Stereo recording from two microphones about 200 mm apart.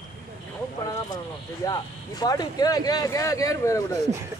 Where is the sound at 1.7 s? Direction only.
20° left (ahead or behind).